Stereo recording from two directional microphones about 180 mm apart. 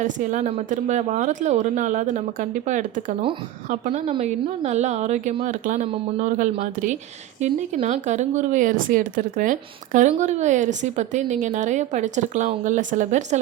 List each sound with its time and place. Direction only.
0.0 s a woman's voice: 45° right (ahead or behind)